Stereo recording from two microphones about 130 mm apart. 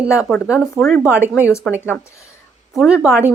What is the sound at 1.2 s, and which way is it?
Speech, 20° left (ahead or behind).